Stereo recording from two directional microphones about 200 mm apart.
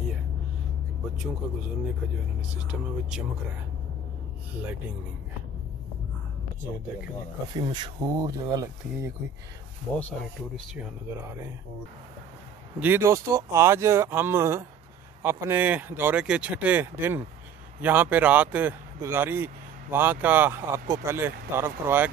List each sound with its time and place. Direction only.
2.5 s speech: 5° right (ahead or behind)
7.5 s speech: 20° right (ahead or behind)
11.2 s speech: 15° right (ahead or behind)
12.7 s speech: 10° right (ahead or behind)